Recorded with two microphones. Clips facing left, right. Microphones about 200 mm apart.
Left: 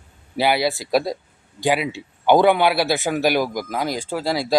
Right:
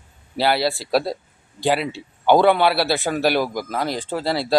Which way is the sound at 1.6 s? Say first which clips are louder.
Even; 15° left (ahead or behind).